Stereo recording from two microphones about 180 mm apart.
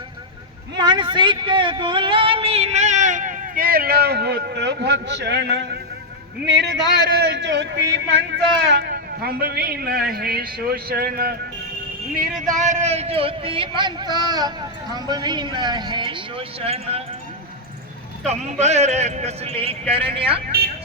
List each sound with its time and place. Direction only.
0.8 s a man's voice: 25° right (ahead or behind); by 11.3 s 55° right (ahead or behind)
12.5 s a man's voice: 40° right (ahead or behind)
18.3 s a man's voice: 40° right (ahead or behind)